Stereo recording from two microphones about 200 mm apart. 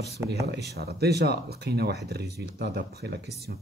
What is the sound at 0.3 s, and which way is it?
Speech, 55° right (ahead or behind).